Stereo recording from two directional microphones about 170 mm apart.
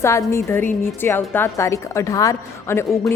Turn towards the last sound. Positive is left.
turn(degrees=15)  # may be behind; listen again after turning